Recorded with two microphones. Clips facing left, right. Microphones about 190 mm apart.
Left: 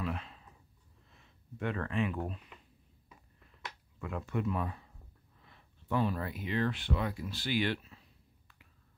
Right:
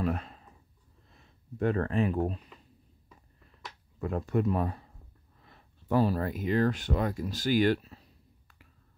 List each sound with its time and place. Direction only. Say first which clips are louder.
0.0 s a sound: right 7 dB; 45° right (ahead or behind)
1.1 s speech: right 5 dB; 40° right (ahead or behind)
4.0 s speech: right 6 dB; 40° right (ahead or behind)